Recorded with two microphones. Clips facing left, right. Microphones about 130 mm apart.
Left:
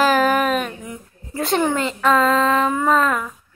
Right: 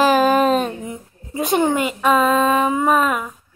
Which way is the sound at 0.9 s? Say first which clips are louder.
Right 2 dB; 20° right (ahead or behind).